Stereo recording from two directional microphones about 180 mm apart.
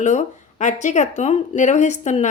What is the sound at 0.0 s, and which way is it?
A woman's voice, 40° left (ahead or behind).